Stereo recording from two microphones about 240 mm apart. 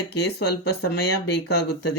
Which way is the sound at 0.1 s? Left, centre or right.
Left.